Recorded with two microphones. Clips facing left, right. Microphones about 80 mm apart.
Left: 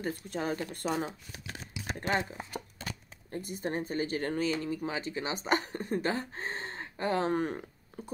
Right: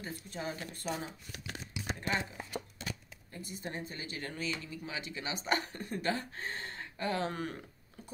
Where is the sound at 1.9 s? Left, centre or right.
Left.